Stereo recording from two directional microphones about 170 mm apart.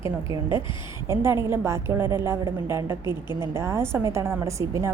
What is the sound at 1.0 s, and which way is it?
A woman's voice, 15° right (ahead or behind).